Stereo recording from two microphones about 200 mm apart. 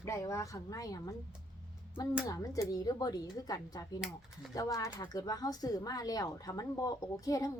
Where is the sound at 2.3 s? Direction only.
15° left (ahead or behind).